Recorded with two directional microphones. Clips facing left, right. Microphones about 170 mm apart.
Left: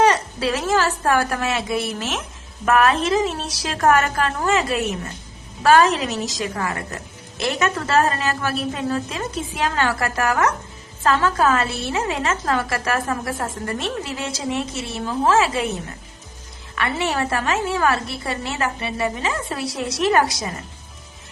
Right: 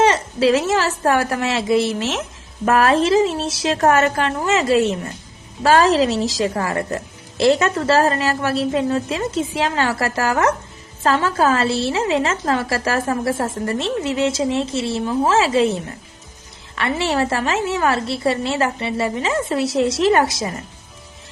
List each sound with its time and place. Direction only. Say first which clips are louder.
0.0 s a woman's voice: right 3 dB; 25° right (ahead or behind)